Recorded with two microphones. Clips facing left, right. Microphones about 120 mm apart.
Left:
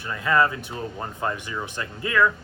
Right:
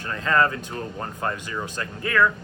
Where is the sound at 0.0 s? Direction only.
15° left (ahead or behind).